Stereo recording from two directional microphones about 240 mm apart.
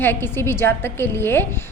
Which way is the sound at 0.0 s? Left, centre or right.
Centre.